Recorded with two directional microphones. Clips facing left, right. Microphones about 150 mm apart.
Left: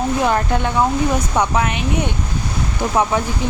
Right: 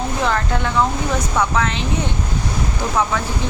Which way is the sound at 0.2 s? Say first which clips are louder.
Even; 15° left (ahead or behind).